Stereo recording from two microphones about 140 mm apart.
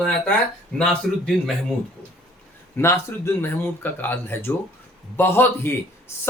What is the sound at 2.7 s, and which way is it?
Speech, 20° left (ahead or behind).